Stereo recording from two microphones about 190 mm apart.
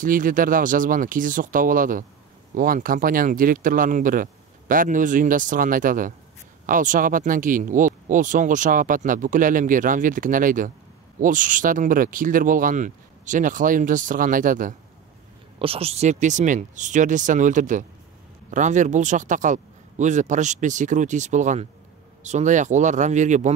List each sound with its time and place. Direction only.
0.0 s speech: 45° right (ahead or behind)
15.6 s speech: 30° right (ahead or behind)